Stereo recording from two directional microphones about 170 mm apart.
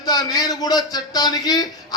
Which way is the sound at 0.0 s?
25° left (ahead or behind).